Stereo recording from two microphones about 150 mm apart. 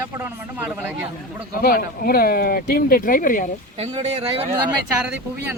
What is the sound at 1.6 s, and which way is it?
Speech, 75° left (ahead or behind).